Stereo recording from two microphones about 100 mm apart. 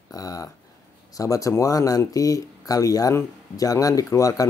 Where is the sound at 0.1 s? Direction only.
35° left (ahead or behind).